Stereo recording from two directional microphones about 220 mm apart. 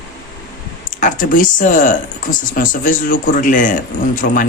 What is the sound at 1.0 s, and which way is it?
Speech, 35° left (ahead or behind).